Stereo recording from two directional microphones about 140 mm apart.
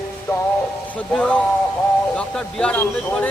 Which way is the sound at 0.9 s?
10° left (ahead or behind).